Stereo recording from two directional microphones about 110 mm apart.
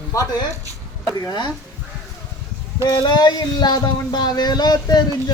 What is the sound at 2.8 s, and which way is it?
Speech, 40° left (ahead or behind).